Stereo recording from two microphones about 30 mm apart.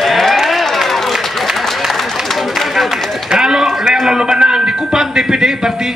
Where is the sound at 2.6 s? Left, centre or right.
Centre.